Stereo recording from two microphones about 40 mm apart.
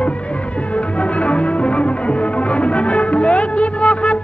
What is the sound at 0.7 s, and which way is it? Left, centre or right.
Music, left.